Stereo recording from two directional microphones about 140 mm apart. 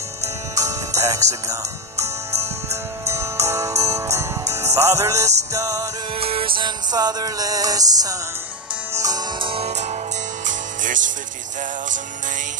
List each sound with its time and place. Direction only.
0.6 s music: 25° right (ahead or behind)
6.1 s music: 40° right (ahead or behind)
10.4 s music: 65° right (ahead or behind)